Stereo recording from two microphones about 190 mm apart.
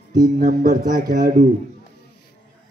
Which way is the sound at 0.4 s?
45° right (ahead or behind).